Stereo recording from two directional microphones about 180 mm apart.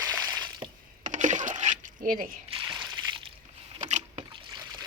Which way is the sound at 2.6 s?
25° right (ahead or behind).